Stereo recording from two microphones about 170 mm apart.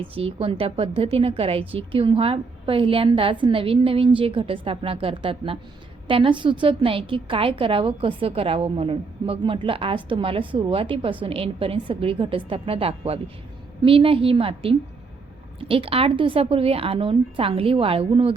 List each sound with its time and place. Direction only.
0.1 s a woman's voice: 35° right (ahead or behind)